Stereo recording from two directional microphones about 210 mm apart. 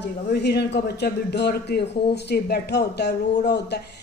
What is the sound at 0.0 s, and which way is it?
A man's voice, 55° left (ahead or behind).